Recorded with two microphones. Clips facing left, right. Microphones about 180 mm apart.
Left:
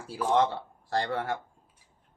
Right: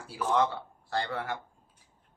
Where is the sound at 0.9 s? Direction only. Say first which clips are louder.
Left 3 dB; 40° left (ahead or behind).